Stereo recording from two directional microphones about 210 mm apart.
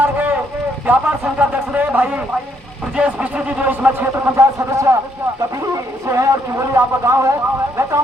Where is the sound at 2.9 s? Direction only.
5° right (ahead or behind).